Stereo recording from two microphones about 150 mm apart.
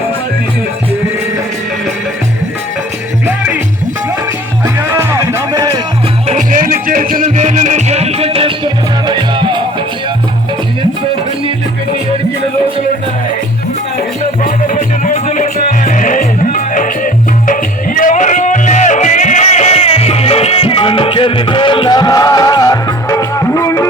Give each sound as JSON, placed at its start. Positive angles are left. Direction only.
{"t": 4.6, "sound": "music", "side_deg": -15}
{"t": 6.2, "sound": "music", "side_deg": -55}
{"t": 14.4, "sound": "music", "side_deg": 60}